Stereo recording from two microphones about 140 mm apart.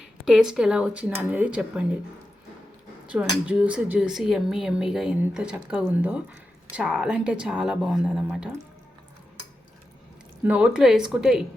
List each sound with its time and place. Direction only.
0.3 s speech: 5° right (ahead or behind)
3.1 s speech: 10° right (ahead or behind)
10.4 s speech: 10° right (ahead or behind)